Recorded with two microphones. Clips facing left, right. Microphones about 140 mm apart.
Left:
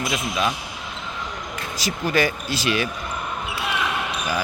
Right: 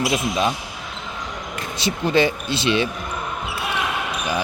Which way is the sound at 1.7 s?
25° right (ahead or behind).